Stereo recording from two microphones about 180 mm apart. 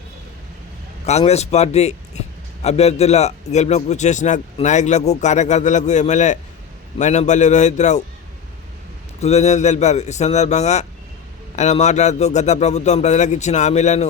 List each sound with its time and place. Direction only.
1.0 s a man's voice: 35° left (ahead or behind)
9.2 s a man's voice: 35° left (ahead or behind)